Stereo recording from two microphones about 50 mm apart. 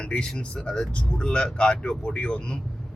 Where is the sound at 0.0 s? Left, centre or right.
Centre.